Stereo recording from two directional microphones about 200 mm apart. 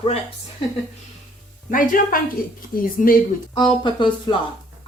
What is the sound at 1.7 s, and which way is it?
Speech, 45° left (ahead or behind).